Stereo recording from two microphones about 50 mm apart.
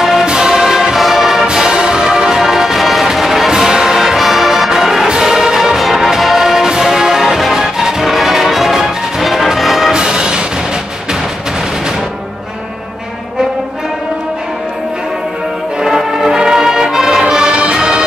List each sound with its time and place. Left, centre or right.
0.0 s music: centre
9.9 s music: centre
15.8 s music: centre